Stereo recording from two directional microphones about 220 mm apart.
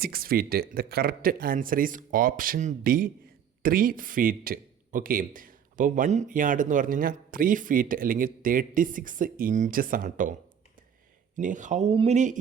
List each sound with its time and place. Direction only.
0.0 s speech: 45° right (ahead or behind)
11.3 s speech: 35° right (ahead or behind)